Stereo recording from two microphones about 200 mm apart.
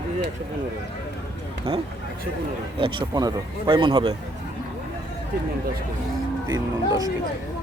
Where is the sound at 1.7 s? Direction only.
30° right (ahead or behind).